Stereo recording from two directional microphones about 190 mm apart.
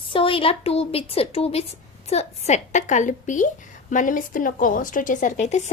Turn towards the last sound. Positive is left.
turn(degrees=40)  # may be behind; listen again after turning